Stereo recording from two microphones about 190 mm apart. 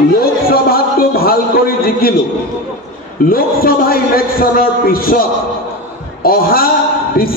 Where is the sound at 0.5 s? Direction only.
50° left (ahead or behind).